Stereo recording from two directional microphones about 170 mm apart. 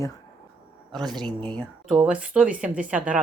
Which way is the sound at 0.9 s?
Centre (ahead or behind).